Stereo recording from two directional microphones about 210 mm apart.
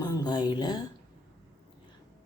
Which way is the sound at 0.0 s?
20° left (ahead or behind).